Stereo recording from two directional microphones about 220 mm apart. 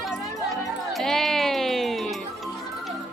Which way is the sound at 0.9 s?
Centre (ahead or behind).